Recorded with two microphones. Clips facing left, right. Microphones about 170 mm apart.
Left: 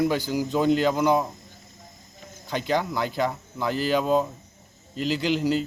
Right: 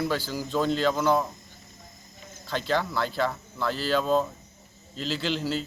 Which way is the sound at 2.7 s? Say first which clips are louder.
Left 2 dB; 15° left (ahead or behind).